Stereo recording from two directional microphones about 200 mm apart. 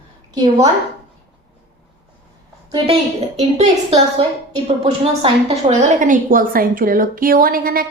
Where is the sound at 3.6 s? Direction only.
30° right (ahead or behind).